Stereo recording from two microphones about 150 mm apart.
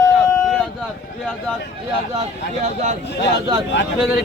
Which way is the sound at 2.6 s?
50° right (ahead or behind).